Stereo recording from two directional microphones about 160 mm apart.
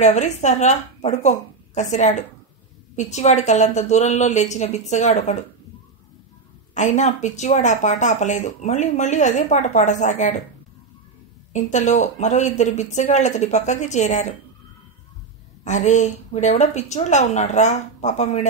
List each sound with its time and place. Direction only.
0.0 s speech: 45° left (ahead or behind)
6.7 s speech: 50° left (ahead or behind)
11.5 s speech: 45° left (ahead or behind)
15.6 s speech: 50° left (ahead or behind)